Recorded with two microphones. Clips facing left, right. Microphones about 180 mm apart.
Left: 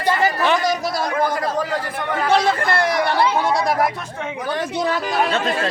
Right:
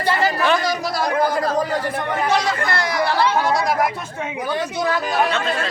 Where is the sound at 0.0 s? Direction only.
15° left (ahead or behind).